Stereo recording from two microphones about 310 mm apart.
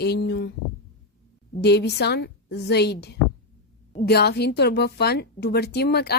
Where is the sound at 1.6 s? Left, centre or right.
Left.